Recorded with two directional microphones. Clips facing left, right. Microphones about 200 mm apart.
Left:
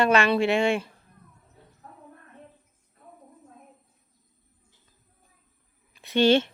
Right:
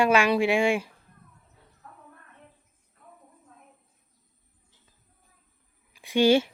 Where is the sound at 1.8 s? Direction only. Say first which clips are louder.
Left 1 dB; 35° left (ahead or behind).